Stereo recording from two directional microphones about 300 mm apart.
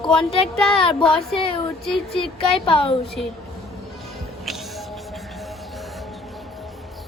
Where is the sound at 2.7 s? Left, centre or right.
Centre.